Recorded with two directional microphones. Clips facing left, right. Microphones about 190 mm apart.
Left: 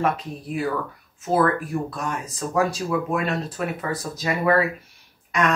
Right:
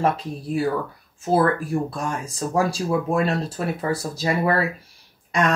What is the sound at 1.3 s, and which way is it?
Speech, 30° right (ahead or behind).